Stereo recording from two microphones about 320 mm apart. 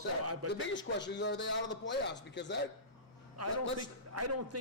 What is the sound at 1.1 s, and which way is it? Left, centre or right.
A man's voice, left.